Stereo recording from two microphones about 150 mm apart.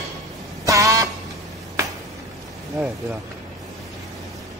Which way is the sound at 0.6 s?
20° right (ahead or behind).